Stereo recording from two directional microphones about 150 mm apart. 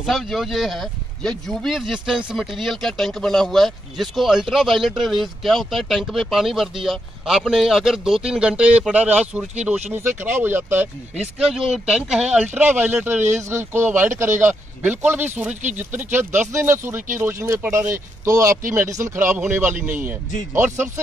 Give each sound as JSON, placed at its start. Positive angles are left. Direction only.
{"t": 0.0, "sound": "speech", "side_deg": 0}
{"t": 11.5, "sound": "speech", "side_deg": -5}
{"t": 16.5, "sound": "speech", "side_deg": -15}